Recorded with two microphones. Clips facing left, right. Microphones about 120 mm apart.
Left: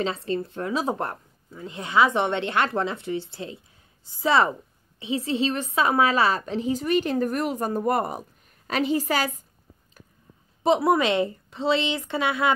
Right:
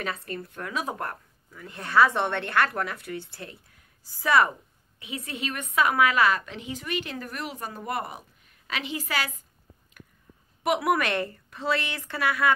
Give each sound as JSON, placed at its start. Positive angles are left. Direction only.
{"t": 0.0, "sound": "speech", "side_deg": 25}
{"t": 10.6, "sound": "speech", "side_deg": 25}